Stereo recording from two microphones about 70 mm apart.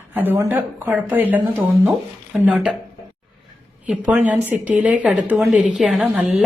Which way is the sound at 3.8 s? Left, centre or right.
Centre.